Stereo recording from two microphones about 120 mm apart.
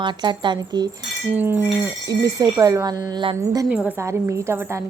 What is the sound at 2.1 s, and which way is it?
Speech, 30° right (ahead or behind).